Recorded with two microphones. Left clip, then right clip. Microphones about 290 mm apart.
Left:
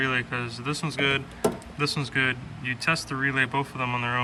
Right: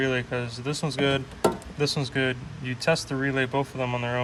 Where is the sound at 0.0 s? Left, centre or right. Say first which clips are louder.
Even; centre.